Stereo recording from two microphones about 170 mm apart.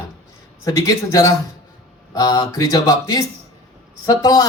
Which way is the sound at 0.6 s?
20° left (ahead or behind).